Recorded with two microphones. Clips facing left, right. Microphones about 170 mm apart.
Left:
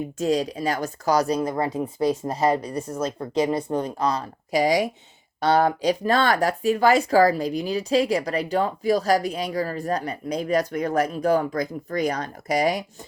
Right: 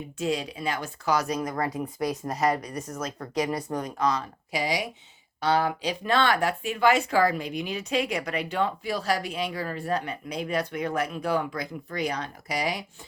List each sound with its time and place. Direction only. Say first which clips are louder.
0.2 s speech: left 5 dB; 40° left (ahead or behind)